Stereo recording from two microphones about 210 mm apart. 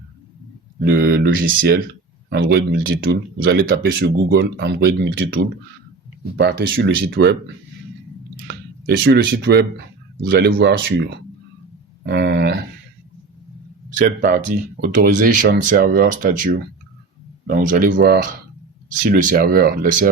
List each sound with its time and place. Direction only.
0.8 s speech: 50° right (ahead or behind)
14.0 s speech: 40° right (ahead or behind)